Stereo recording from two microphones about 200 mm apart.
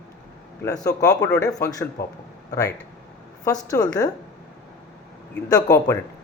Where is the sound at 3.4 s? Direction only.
20° left (ahead or behind).